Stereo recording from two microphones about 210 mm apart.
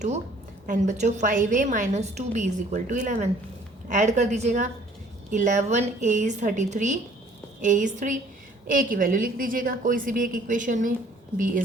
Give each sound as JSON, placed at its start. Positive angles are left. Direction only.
{"t": 0.7, "sound": "a woman's voice", "side_deg": -35}